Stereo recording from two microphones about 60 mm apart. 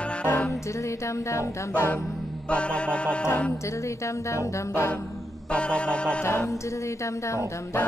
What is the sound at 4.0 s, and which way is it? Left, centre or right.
Music, left.